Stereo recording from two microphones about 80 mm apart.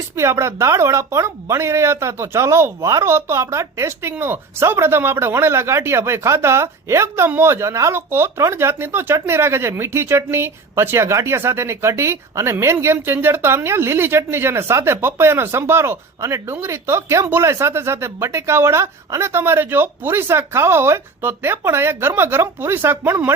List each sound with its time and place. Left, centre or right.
0.2 s speech: right